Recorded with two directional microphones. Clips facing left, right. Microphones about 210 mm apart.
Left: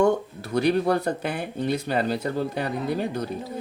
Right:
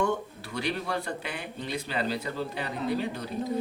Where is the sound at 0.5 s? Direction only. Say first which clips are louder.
Left 10 dB; 45° left (ahead or behind).